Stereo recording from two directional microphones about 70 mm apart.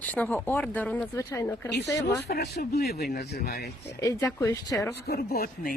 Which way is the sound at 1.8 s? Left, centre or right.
Left.